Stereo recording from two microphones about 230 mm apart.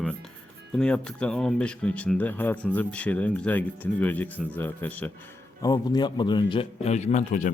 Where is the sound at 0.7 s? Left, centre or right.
Centre.